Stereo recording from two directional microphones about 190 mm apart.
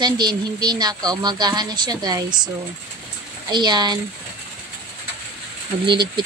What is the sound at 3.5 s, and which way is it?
Speech, 25° right (ahead or behind).